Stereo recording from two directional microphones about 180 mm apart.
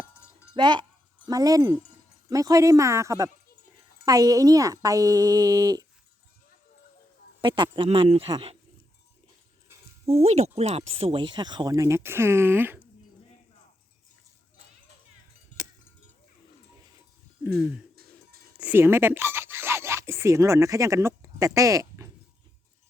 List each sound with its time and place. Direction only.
0.5 s speech: 25° right (ahead or behind)
7.4 s speech: 25° right (ahead or behind)
10.2 s speech: 35° right (ahead or behind); by 12.8 s 10° right (ahead or behind)
17.4 s a sound: 10° right (ahead or behind)
18.6 s speech: 10° right (ahead or behind)